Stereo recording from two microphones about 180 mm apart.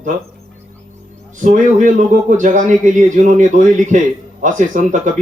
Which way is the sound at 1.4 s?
45° right (ahead or behind).